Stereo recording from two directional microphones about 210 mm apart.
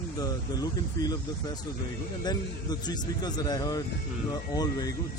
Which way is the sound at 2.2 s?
20° left (ahead or behind).